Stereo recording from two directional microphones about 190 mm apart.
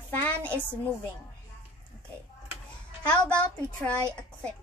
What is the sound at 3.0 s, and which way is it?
A child's voice, 5° left (ahead or behind).